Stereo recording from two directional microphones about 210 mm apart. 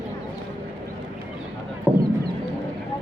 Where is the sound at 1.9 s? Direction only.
5° right (ahead or behind).